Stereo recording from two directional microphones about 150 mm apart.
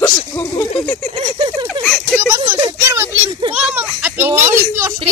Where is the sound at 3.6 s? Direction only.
5° right (ahead or behind).